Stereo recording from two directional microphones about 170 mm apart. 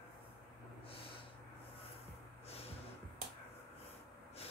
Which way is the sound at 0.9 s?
35° left (ahead or behind).